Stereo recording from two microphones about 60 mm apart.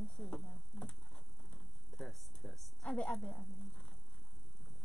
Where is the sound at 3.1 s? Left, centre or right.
Centre.